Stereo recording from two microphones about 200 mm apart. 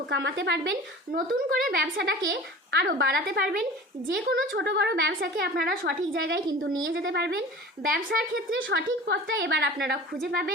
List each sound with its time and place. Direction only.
0.1 s a woman's voice: 60° right (ahead or behind)
8.5 s a woman's voice: 65° right (ahead or behind)